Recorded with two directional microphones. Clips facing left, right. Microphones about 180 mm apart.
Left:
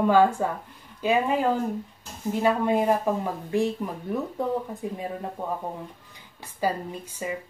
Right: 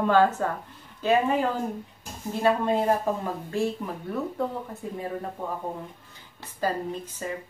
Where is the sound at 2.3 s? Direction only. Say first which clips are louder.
Left 1 dB; 15° left (ahead or behind).